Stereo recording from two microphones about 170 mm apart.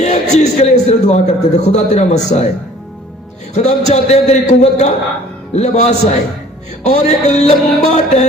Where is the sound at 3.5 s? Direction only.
40° left (ahead or behind).